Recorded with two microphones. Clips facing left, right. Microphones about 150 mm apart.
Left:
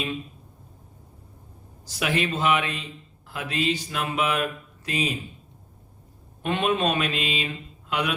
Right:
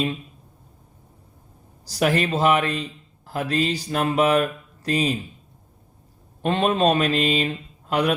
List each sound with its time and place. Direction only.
1.8 s a man's voice: 40° right (ahead or behind)
6.4 s a man's voice: 35° right (ahead or behind)